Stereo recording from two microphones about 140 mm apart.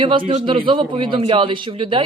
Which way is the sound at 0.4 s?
35° right (ahead or behind).